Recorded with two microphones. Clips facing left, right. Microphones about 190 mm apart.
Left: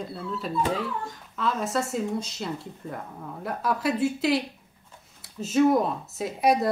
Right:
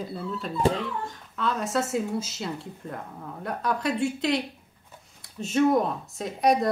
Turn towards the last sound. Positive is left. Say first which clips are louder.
# even
turn(degrees=5)  # may be behind; listen again after turning